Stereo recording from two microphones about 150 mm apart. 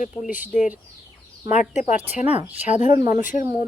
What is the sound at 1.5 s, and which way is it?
Speech, 55° left (ahead or behind).